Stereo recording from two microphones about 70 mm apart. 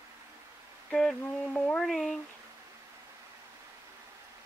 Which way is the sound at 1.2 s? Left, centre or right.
Centre.